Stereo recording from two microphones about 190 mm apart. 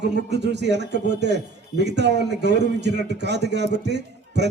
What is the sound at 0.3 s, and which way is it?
A man's voice, 60° right (ahead or behind).